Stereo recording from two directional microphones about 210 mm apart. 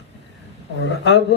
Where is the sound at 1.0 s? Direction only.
55° left (ahead or behind).